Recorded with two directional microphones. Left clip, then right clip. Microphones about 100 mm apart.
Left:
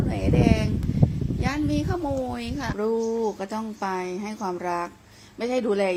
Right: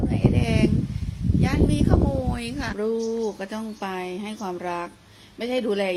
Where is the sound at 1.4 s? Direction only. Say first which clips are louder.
Right 2 dB; 45° left (ahead or behind).